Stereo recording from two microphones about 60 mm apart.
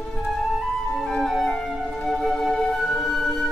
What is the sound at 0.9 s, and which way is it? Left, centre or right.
Music, centre.